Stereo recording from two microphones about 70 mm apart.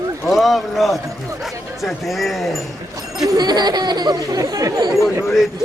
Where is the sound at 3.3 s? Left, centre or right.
Right.